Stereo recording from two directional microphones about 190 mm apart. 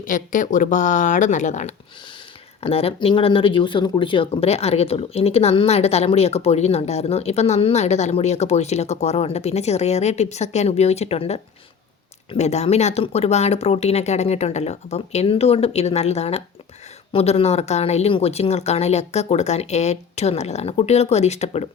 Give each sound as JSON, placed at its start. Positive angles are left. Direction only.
{"t": 0.0, "sound": "speech", "side_deg": 45}